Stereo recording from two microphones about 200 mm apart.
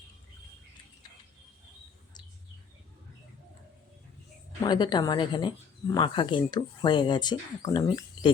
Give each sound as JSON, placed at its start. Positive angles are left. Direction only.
{"t": 4.6, "sound": "speech", "side_deg": 20}